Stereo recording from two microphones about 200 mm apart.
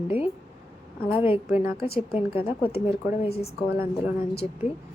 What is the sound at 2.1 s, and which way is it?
A woman's voice, 30° left (ahead or behind).